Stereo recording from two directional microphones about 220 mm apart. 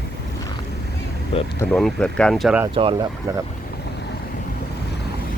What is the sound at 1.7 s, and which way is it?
Speech, 5° left (ahead or behind).